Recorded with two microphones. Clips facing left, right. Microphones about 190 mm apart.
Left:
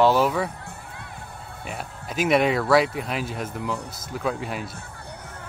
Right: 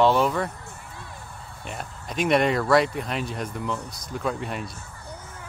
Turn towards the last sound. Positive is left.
turn(degrees=0)  # may be behind; listen again after turning